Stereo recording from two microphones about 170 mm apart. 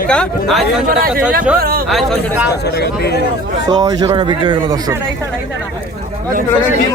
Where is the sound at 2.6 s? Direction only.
75° left (ahead or behind).